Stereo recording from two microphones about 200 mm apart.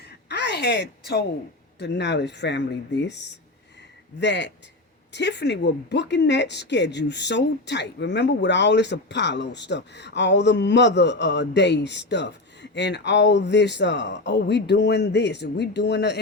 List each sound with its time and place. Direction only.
0.0 s a sound: 55° left (ahead or behind)
1.8 s speech: 60° left (ahead or behind)
4.2 s speech: 60° left (ahead or behind)